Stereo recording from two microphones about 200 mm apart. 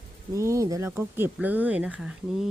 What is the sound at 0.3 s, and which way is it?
Speech, 15° right (ahead or behind).